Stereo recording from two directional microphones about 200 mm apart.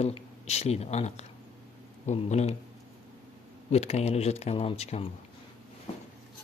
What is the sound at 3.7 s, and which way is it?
Speech, 35° left (ahead or behind).